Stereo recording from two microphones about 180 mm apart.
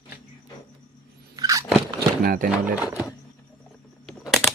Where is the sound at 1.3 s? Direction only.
20° right (ahead or behind).